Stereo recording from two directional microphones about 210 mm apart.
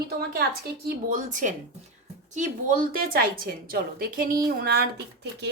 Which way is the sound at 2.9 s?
45° right (ahead or behind).